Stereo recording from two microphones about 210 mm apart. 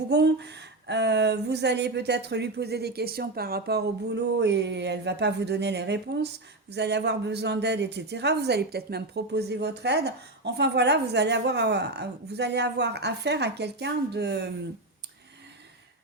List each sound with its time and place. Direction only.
0.1 s speech: 55° right (ahead or behind)